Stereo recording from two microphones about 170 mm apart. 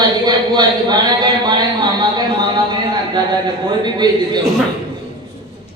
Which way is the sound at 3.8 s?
25° right (ahead or behind).